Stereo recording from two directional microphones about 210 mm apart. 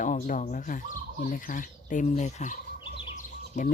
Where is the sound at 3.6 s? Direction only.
35° left (ahead or behind).